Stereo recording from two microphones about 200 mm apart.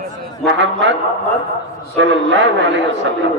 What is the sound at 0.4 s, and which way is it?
Speech, 65° right (ahead or behind).